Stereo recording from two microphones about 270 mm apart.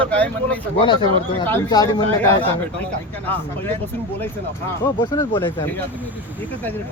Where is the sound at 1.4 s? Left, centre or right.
Centre.